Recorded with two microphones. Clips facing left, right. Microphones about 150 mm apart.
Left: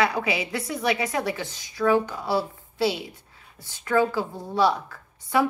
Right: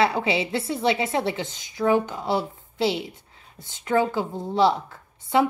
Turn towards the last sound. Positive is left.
turn(degrees=-25)  # may be behind; listen again after turning